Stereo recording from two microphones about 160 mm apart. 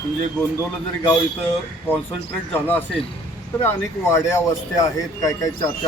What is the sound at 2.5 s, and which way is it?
Speech, 10° left (ahead or behind).